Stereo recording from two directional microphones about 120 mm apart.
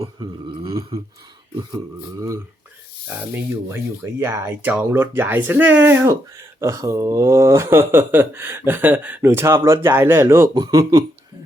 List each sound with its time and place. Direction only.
0.0 s a sound: 40° right (ahead or behind)
0.9 s speech: 30° right (ahead or behind)
3.1 s speech: 15° right (ahead or behind)